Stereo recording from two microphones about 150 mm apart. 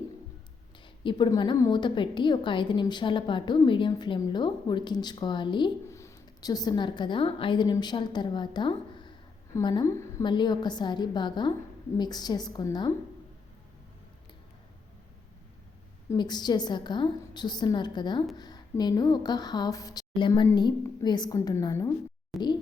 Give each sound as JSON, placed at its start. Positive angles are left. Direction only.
{"t": 1.3, "sound": "a woman's voice", "side_deg": 25}
{"t": 5.9, "sound": "a woman's voice", "side_deg": 20}
{"t": 9.8, "sound": "a woman's voice", "side_deg": 20}
{"t": 10.2, "sound": "speech", "side_deg": 30}
{"t": 16.1, "sound": "speech", "side_deg": 30}